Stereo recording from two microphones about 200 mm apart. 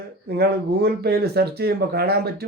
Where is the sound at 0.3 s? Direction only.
55° right (ahead or behind).